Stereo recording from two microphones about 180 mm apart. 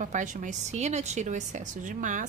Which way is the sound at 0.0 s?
45° right (ahead or behind).